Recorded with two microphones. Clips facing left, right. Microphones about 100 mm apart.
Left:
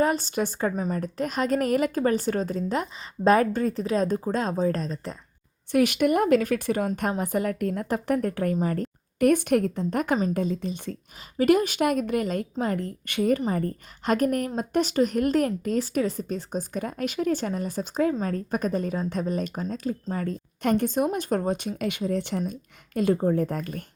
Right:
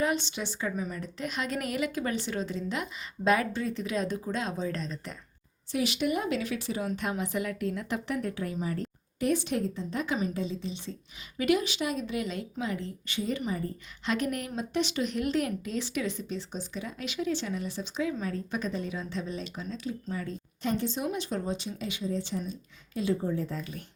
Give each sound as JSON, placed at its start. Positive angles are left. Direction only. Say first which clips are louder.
{"t": 0.0, "sound": "a woman's voice", "louder": "left 6 dB", "side_deg": 40}
{"t": 5.7, "sound": "a woman's voice", "louder": "left 8 dB", "side_deg": 55}